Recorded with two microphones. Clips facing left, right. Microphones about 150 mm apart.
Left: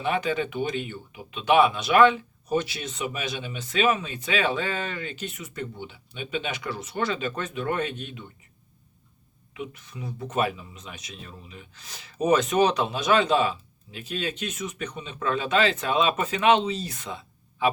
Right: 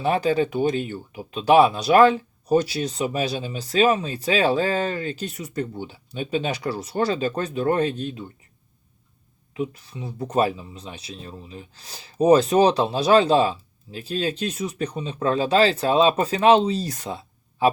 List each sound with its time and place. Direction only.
0.0 s speech: 35° right (ahead or behind)
9.6 s speech: 35° right (ahead or behind)